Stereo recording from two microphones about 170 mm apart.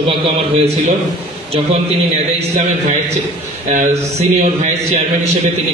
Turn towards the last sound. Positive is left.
turn(degrees=-45)  # may be behind; listen again after turning